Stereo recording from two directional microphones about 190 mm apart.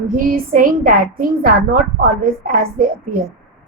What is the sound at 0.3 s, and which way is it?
Speech, 45° right (ahead or behind).